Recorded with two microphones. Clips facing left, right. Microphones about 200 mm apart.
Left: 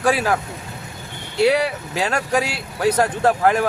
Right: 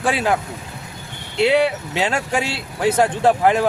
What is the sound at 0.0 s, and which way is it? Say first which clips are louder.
Speech: left 1 dB; 25° right (ahead or behind).